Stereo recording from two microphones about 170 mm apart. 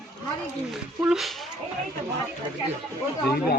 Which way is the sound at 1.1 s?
Centre (ahead or behind).